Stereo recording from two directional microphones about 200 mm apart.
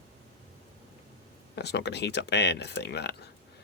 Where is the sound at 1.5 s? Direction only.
55° left (ahead or behind).